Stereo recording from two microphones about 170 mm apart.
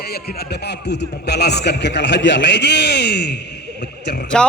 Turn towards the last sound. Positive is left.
turn(degrees=5)  # may be behind; listen again after turning